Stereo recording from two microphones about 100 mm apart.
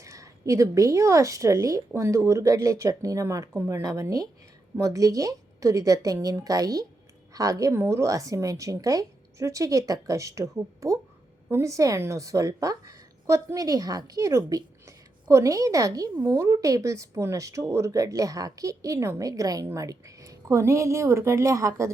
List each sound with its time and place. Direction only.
0.0 s a woman's voice: 30° right (ahead or behind)